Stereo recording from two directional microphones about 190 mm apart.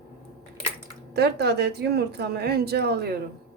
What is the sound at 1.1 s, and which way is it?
Speech, 60° right (ahead or behind).